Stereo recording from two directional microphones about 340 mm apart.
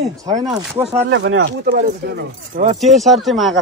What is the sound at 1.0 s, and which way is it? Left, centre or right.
Speech, right.